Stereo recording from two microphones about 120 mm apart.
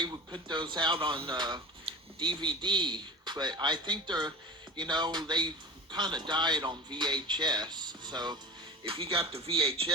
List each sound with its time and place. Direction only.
0.0 s a man's voice: 40° right (ahead or behind)
8.8 s speech: 50° right (ahead or behind)